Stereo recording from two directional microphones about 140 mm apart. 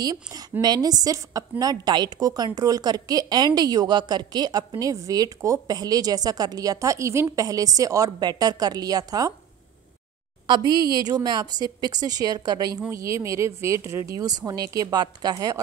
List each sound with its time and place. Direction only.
0.0 s a woman's voice: 25° right (ahead or behind)
10.8 s a woman's voice: 30° right (ahead or behind)